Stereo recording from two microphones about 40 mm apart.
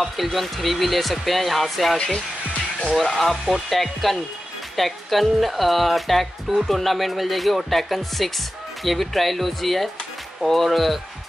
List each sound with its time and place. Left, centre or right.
0.0 s speech: centre
2.0 s speech: centre